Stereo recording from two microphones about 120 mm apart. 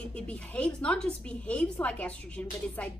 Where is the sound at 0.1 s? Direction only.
10° left (ahead or behind).